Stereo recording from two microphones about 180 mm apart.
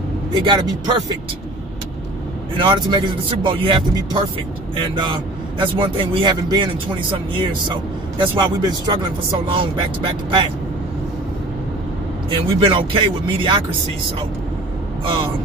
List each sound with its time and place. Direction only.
0.3 s speech: 25° right (ahead or behind)
2.5 s speech: 25° right (ahead or behind)
12.3 s speech: 30° right (ahead or behind)